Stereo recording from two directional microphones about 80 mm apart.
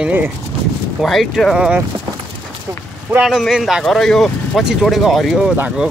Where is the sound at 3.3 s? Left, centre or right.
Centre.